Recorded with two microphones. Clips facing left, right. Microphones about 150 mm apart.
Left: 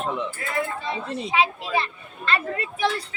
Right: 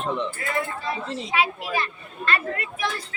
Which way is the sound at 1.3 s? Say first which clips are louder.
Left 2 dB; 25° left (ahead or behind).